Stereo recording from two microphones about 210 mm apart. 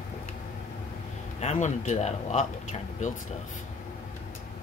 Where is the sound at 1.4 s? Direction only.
35° left (ahead or behind).